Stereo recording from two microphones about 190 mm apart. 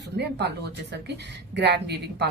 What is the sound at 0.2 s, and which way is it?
A woman's voice, 60° right (ahead or behind).